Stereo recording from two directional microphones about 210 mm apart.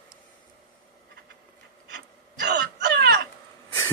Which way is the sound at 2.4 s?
50° right (ahead or behind).